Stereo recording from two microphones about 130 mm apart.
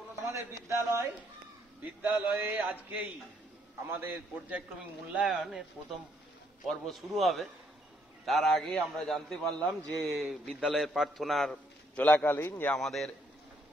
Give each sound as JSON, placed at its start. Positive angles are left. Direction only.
{"t": 0.3, "sound": "speech", "side_deg": -20}
{"t": 2.0, "sound": "a sound", "side_deg": -15}
{"t": 5.1, "sound": "a man's voice", "side_deg": -5}
{"t": 6.7, "sound": "a man's voice", "side_deg": 0}
{"t": 12.7, "sound": "a man's voice", "side_deg": 0}